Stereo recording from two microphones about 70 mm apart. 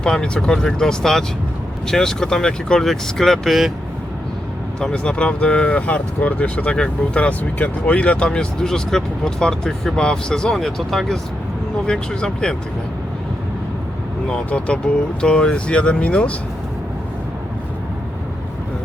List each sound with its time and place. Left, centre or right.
0.0 s speech: centre
4.8 s speech: centre
14.3 s speech: centre